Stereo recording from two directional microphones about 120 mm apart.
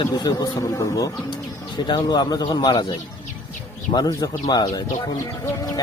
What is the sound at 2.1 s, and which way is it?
Speech, 40° left (ahead or behind).